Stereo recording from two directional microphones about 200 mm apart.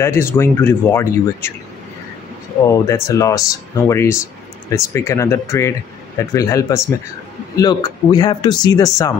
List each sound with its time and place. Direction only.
0.0 s speech: 10° left (ahead or behind)
2.6 s speech: 15° left (ahead or behind)